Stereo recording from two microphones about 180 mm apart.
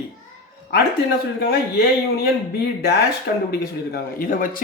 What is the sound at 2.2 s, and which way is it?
Speech, 65° left (ahead or behind).